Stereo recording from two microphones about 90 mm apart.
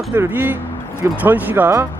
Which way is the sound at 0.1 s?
20° right (ahead or behind).